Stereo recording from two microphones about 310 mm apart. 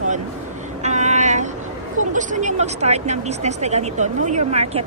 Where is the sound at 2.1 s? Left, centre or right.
Right.